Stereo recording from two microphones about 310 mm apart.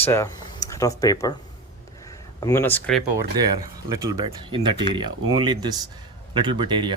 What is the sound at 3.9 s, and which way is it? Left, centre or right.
Speech, centre.